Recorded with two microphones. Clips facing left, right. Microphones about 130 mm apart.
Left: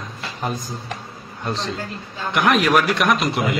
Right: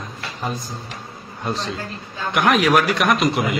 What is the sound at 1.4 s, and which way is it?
A man's voice, centre (ahead or behind).